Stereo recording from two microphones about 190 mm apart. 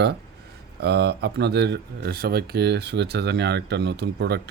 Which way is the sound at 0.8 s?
60° right (ahead or behind).